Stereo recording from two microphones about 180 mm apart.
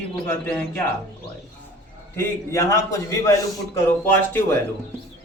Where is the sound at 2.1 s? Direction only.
15° left (ahead or behind).